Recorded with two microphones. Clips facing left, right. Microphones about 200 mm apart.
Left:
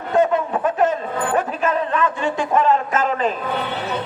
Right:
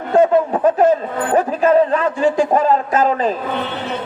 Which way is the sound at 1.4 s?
35° right (ahead or behind).